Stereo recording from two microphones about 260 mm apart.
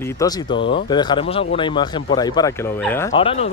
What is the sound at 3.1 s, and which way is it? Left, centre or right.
Speech, left.